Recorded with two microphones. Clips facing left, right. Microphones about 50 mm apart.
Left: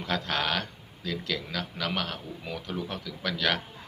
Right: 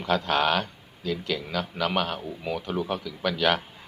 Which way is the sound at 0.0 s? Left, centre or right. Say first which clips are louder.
Right 6 dB; centre.